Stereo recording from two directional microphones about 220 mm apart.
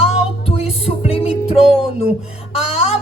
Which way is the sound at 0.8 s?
25° left (ahead or behind).